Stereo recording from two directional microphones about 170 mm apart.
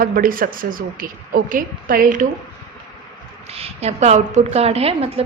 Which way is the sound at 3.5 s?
35° right (ahead or behind).